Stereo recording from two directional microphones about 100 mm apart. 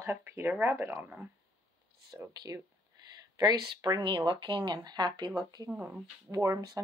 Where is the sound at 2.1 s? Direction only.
40° right (ahead or behind).